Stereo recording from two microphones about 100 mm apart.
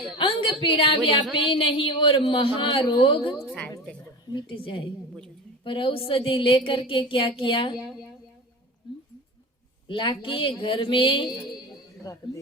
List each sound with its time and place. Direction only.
0.2 s a man's voice: 55° left (ahead or behind)
4.4 s a man's voice: 55° left (ahead or behind)
9.8 s a man's voice: 60° left (ahead or behind)
12.1 s speech: 30° left (ahead or behind)